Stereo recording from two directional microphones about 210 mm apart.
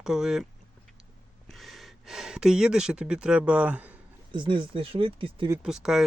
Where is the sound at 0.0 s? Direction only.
5° right (ahead or behind).